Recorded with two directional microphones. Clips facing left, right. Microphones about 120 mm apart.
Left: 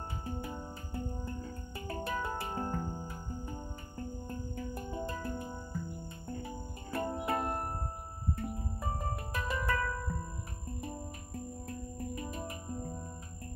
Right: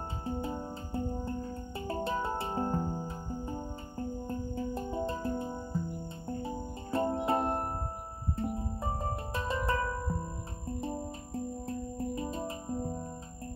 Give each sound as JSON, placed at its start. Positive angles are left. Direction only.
{"t": 0.2, "sound": "music", "side_deg": -25}